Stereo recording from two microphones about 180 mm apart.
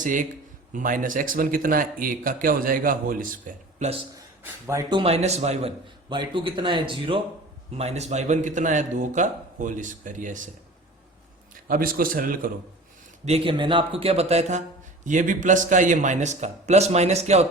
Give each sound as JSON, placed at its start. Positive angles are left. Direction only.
{"t": 0.0, "sound": "speech", "side_deg": -45}
{"t": 4.6, "sound": "speech", "side_deg": -15}
{"t": 4.9, "sound": "a man's voice", "side_deg": -35}
{"t": 11.7, "sound": "speech", "side_deg": -55}
{"t": 13.2, "sound": "a man's voice", "side_deg": -30}